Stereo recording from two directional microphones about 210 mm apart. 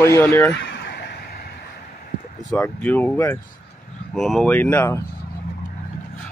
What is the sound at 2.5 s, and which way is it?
Speech, 5° left (ahead or behind).